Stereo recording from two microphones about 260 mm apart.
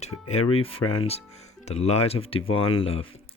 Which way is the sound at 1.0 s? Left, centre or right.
Left.